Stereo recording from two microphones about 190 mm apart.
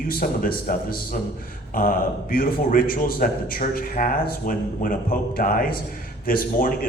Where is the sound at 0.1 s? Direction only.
50° left (ahead or behind).